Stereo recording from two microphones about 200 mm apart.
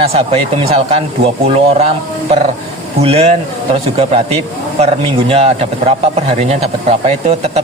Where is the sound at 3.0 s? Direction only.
30° right (ahead or behind).